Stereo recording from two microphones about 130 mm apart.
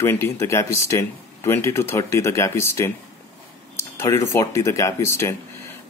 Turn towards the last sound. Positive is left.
turn(degrees=20)  # may be behind; listen again after turning